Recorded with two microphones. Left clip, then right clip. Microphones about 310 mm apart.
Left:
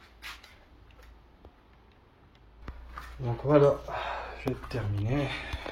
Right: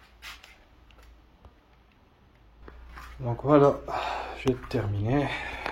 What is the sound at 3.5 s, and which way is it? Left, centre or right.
Speech, right.